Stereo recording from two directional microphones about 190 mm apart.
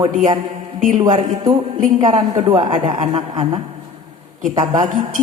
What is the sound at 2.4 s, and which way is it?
A woman's voice, 30° right (ahead or behind).